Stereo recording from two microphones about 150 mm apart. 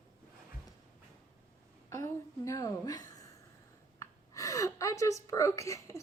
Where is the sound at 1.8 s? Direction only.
20° left (ahead or behind).